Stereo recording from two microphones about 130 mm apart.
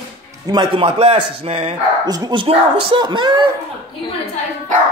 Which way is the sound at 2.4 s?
45° right (ahead or behind).